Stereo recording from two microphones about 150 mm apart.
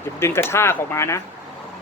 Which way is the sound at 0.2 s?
15° left (ahead or behind).